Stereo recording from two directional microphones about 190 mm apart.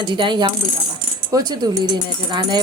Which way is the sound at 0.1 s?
25° right (ahead or behind).